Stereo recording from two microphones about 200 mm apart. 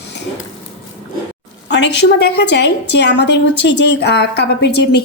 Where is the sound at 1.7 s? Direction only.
60° left (ahead or behind).